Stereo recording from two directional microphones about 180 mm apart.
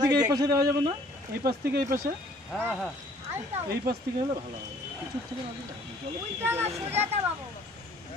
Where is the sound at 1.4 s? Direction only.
55° right (ahead or behind).